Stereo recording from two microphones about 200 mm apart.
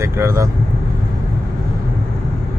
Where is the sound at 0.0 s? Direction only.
15° right (ahead or behind).